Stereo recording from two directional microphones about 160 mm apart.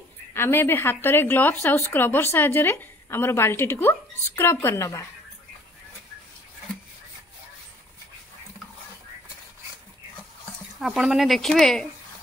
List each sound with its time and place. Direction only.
0.3 s a woman's voice: 15° left (ahead or behind)
10.8 s speech: 5° right (ahead or behind)